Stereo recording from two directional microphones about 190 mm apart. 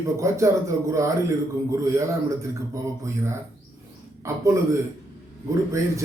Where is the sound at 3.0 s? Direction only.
15° right (ahead or behind).